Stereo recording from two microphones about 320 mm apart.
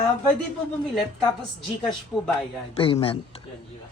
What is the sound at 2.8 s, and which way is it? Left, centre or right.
Speech, centre.